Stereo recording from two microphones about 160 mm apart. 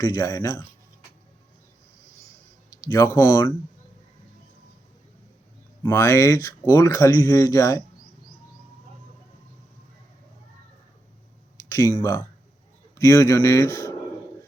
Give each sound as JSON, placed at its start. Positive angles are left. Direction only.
{"t": 0.0, "sound": "speech", "side_deg": 20}
{"t": 2.6, "sound": "speech", "side_deg": 20}
{"t": 5.8, "sound": "speech", "side_deg": 15}
{"t": 11.7, "sound": "speech", "side_deg": 20}
{"t": 13.0, "sound": "speech", "side_deg": 20}